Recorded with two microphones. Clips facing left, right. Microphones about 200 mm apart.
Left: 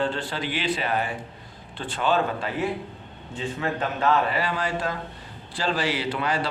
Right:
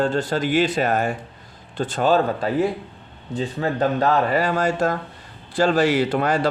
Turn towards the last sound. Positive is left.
turn(degrees=-45)  # may be behind; listen again after turning